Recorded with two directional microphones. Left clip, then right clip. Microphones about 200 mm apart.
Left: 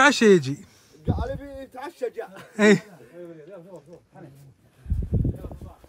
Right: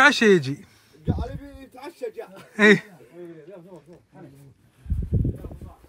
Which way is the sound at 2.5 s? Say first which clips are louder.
Right 2 dB; 15° left (ahead or behind).